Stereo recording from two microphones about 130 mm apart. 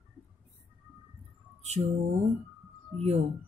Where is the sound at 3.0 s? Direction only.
55° right (ahead or behind).